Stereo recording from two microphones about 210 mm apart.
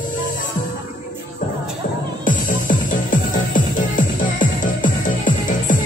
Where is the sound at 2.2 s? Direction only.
40° left (ahead or behind).